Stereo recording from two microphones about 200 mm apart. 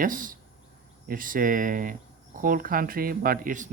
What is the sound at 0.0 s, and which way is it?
Speech, 45° right (ahead or behind).